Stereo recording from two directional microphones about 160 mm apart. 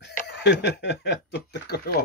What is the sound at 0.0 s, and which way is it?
Speech, 90° left.